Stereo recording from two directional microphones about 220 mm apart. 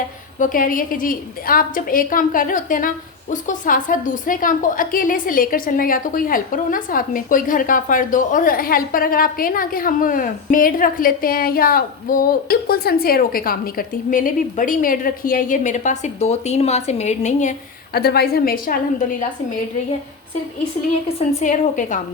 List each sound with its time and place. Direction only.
0.3 s a woman's voice: 35° left (ahead or behind)
17.9 s a woman's voice: 45° left (ahead or behind)
21.2 s a woman's voice: 35° left (ahead or behind)